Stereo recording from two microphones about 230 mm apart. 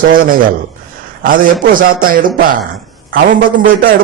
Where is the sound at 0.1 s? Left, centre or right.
Right.